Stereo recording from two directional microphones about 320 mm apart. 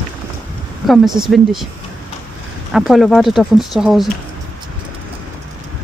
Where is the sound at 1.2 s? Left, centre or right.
Centre.